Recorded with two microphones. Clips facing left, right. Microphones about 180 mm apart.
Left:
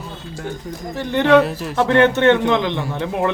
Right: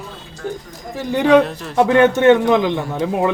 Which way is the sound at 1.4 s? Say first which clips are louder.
Left 1 dB; 5° left (ahead or behind).